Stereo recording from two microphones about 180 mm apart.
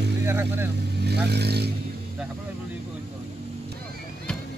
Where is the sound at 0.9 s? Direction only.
65° right (ahead or behind).